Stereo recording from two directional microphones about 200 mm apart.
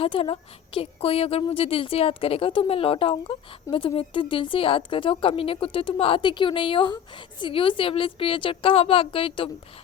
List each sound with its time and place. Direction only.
0.0 s a woman's voice: 30° left (ahead or behind)